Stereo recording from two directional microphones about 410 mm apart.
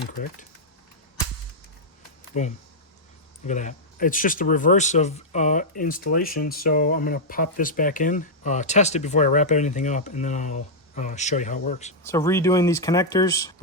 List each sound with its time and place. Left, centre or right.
2.3 s speech: centre
12.0 s speech: centre